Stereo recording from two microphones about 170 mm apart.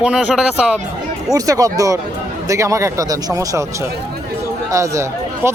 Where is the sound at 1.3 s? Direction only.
20° right (ahead or behind).